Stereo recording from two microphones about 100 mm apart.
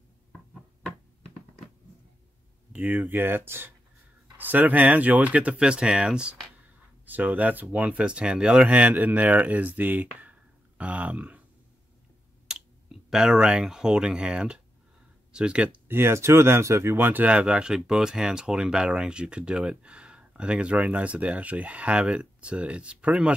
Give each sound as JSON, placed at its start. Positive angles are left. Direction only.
{"t": 2.7, "sound": "speech", "side_deg": -15}
{"t": 12.5, "sound": "clicking", "side_deg": -5}
{"t": 13.1, "sound": "speech", "side_deg": -5}
{"t": 15.9, "sound": "speech", "side_deg": -25}